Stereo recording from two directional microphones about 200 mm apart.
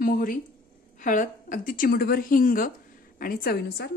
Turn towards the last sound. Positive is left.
turn(degrees=50)  # may be behind; listen again after turning